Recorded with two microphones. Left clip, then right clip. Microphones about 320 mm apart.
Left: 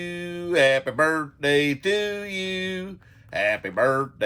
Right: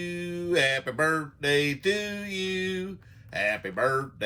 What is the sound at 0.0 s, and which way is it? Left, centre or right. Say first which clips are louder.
Music: left 2 dB; left.